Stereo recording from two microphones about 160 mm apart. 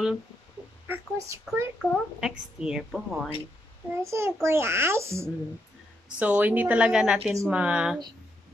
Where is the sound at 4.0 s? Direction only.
15° right (ahead or behind).